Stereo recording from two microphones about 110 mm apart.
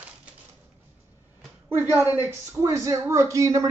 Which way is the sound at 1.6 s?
20° right (ahead or behind).